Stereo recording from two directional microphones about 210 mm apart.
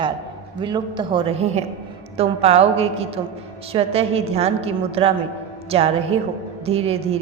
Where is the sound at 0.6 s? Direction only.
20° right (ahead or behind).